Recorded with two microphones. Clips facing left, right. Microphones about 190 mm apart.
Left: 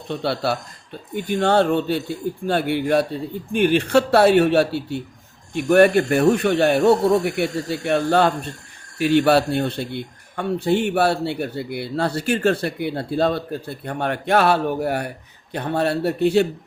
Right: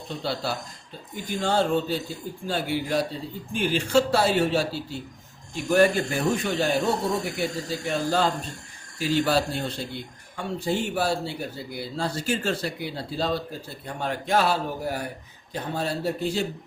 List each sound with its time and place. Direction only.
0.1 s a man's voice: 65° left (ahead or behind)